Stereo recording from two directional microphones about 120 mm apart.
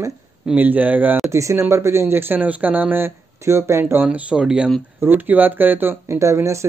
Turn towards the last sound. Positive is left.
turn(degrees=-25)  # may be behind; listen again after turning